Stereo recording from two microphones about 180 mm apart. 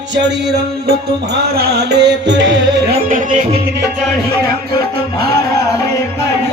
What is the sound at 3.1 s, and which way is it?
Music, 45° right (ahead or behind).